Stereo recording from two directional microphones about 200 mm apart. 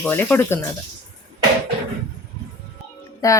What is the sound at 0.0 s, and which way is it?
Speech, 10° left (ahead or behind).